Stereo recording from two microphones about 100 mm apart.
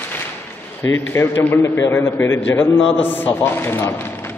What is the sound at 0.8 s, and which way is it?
A man's voice, 20° left (ahead or behind).